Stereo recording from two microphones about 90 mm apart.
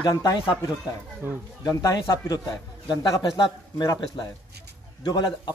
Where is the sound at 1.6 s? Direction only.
45° left (ahead or behind).